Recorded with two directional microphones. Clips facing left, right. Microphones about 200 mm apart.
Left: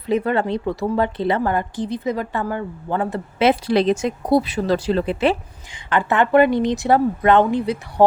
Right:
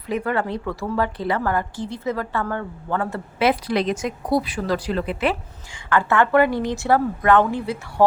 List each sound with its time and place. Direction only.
0.1 s a woman's voice: 25° left (ahead or behind)